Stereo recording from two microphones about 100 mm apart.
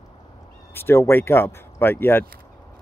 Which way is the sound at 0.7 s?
25° left (ahead or behind).